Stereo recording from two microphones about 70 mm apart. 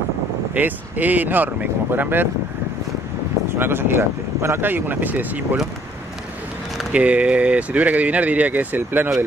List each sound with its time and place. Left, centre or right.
0.6 s speech: right
3.5 s speech: right
6.9 s speech: centre